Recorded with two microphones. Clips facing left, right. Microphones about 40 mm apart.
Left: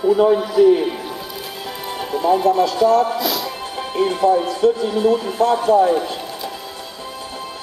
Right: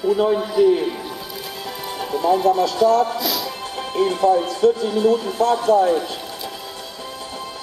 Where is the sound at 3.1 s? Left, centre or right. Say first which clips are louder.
Left 2 dB; centre.